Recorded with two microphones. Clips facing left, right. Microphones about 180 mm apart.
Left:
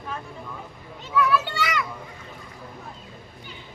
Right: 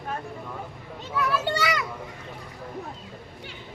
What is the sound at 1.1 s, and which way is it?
Children playing, 40° right (ahead or behind).